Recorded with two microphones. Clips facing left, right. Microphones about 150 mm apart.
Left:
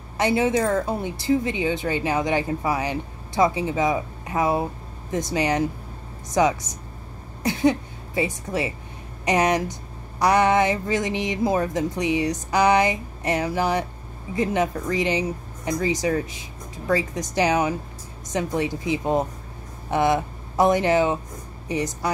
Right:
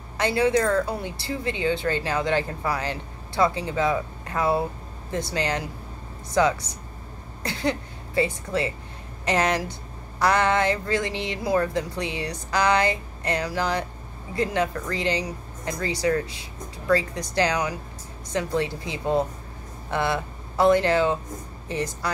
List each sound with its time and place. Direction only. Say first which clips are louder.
0.2 s speech: left 1 dB; 15° left (ahead or behind)